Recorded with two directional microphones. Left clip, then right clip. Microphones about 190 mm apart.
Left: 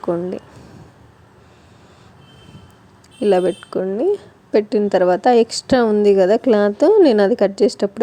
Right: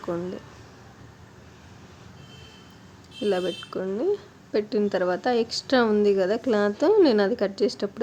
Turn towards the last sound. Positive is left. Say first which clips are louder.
# left 9 dB
turn(degrees=35)  # may be behind; listen again after turning